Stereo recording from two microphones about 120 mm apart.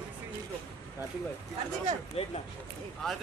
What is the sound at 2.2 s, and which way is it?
Speech, 60° left (ahead or behind).